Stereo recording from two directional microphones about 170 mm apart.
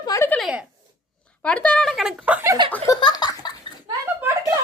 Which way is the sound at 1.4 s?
5° left (ahead or behind).